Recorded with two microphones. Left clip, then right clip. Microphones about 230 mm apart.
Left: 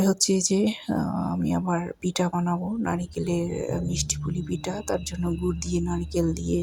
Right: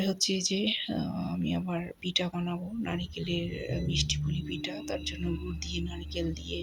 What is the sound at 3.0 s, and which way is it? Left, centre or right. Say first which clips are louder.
Speech: left 6 dB; left.